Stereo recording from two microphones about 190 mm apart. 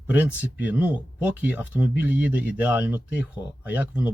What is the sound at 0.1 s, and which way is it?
Speech, 10° right (ahead or behind).